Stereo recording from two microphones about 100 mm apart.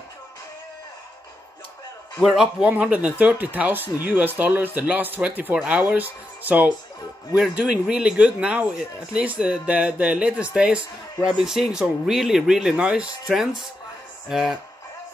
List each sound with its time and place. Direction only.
2.2 s speech: 5° right (ahead or behind)